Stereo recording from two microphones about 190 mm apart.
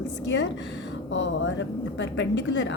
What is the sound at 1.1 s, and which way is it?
A woman's voice, 70° left (ahead or behind).